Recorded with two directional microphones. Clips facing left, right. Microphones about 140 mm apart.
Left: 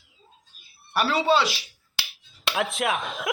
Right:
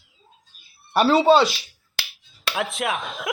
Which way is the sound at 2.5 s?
Centre (ahead or behind).